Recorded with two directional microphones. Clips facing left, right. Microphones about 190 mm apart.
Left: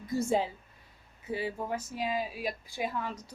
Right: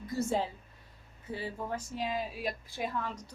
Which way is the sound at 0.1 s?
10° left (ahead or behind).